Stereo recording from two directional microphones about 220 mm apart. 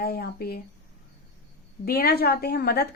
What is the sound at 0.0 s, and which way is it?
Speech, 45° left (ahead or behind).